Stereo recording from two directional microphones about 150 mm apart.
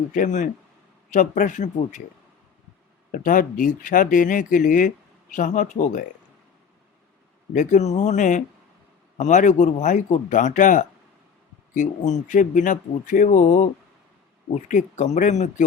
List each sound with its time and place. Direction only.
0.1 s speech: 60° left (ahead or behind)
3.1 s speech: 65° left (ahead or behind)
7.5 s speech: 55° left (ahead or behind)